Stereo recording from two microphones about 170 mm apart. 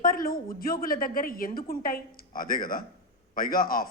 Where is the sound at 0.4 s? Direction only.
60° left (ahead or behind).